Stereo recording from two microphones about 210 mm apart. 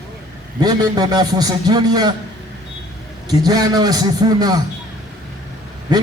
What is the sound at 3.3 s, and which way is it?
A man's voice, 20° right (ahead or behind).